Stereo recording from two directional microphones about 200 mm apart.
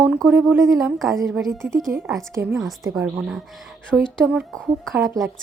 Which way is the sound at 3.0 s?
5° right (ahead or behind).